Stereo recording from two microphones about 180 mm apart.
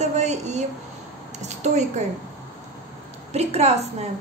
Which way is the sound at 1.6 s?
40° right (ahead or behind).